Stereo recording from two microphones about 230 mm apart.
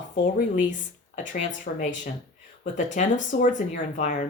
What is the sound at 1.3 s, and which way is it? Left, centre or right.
Speech, left.